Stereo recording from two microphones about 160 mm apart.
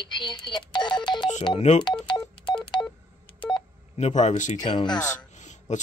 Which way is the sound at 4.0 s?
45° left (ahead or behind).